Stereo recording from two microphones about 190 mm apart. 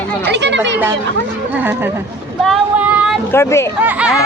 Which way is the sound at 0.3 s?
65° right (ahead or behind).